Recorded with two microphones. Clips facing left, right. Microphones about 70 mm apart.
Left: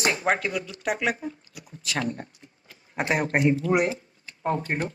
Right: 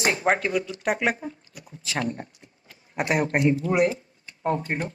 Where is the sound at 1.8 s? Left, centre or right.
Right.